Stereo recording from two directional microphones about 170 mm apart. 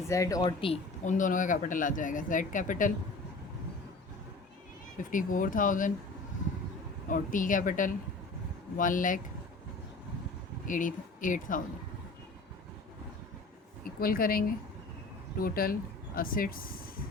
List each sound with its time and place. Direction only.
0.1 s speech: 20° left (ahead or behind)
1.0 s speech: 50° left (ahead or behind)
5.1 s speech: 50° left (ahead or behind)
7.1 s speech: 50° left (ahead or behind)
10.7 s speech: 50° left (ahead or behind)
13.8 s speech: 60° left (ahead or behind)